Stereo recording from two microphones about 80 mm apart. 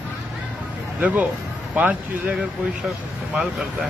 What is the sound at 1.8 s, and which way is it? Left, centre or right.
Speech, right.